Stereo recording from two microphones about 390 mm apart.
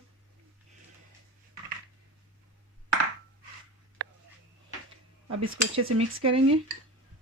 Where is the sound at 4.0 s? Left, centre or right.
Right.